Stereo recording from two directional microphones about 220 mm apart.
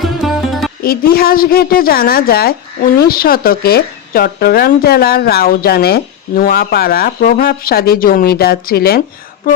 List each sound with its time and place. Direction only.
0.0 s music: centre (ahead or behind)
0.8 s speech: 45° left (ahead or behind)